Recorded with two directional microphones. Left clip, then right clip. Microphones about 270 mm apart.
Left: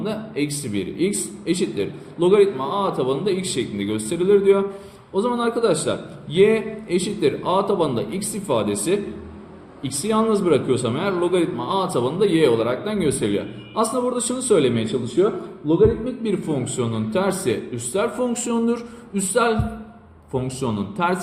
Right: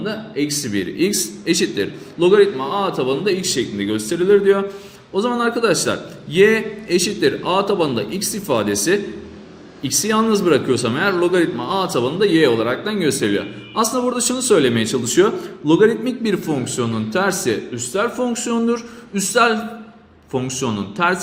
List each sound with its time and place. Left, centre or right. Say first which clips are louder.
0.0 s a man's voice: right 2 dB; centre